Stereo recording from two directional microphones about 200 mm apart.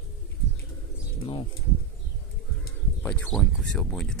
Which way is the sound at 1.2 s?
25° left (ahead or behind).